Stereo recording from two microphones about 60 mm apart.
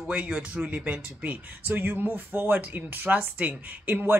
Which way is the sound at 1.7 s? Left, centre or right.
Right.